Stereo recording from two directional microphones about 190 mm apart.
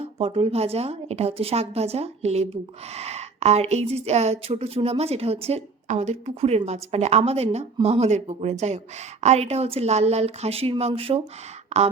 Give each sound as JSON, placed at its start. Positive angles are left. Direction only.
{"t": 0.0, "sound": "a woman's voice", "side_deg": -30}